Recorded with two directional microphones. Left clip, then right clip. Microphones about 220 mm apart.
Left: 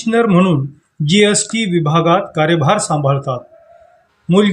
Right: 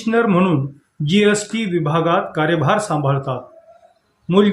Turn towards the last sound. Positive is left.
turn(degrees=25)  # may be behind; listen again after turning